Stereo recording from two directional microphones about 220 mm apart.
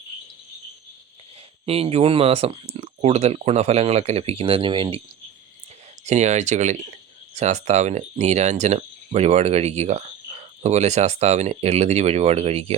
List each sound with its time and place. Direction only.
1.6 s speech: 25° right (ahead or behind)
6.1 s speech: 30° right (ahead or behind)